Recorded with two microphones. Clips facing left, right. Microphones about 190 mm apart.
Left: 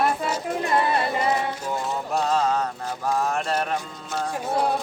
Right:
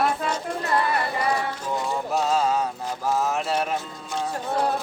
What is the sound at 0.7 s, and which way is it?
Music, 25° left (ahead or behind).